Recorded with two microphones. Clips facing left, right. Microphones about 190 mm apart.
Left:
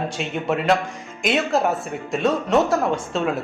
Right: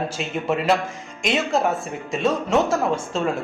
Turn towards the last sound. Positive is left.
turn(degrees=0)  # may be behind; listen again after turning